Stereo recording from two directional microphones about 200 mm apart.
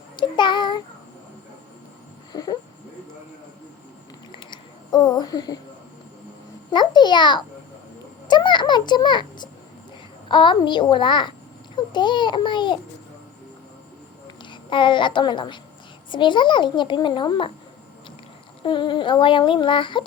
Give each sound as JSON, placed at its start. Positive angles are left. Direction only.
{"t": 0.2, "sound": "child singing", "side_deg": 25}
{"t": 2.3, "sound": "child singing", "side_deg": 20}
{"t": 4.4, "sound": "a sound", "side_deg": 20}
{"t": 6.7, "sound": "child singing", "side_deg": 20}
{"t": 8.3, "sound": "a child's voice", "side_deg": 20}
{"t": 10.2, "sound": "child singing", "side_deg": 25}
{"t": 14.5, "sound": "child singing", "side_deg": 25}
{"t": 18.6, "sound": "child singing", "side_deg": 25}